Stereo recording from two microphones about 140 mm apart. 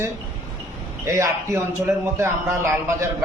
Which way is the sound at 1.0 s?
20° right (ahead or behind).